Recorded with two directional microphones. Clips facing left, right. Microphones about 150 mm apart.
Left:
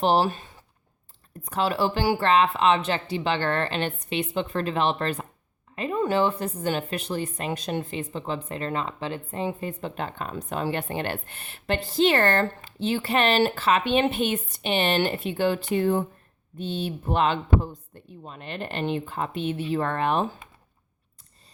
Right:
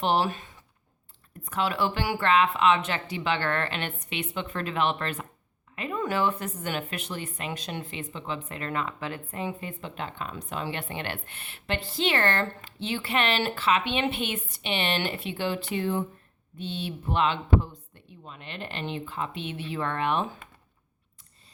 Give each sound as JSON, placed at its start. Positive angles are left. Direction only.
{"t": 0.0, "sound": "a woman's voice", "side_deg": 35}
{"t": 1.5, "sound": "a woman's voice", "side_deg": 35}